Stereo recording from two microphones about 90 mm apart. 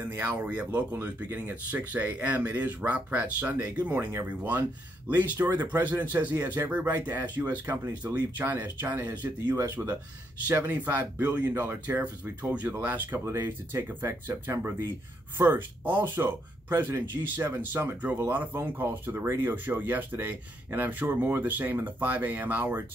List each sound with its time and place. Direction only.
0.0 s speech: 25° right (ahead or behind)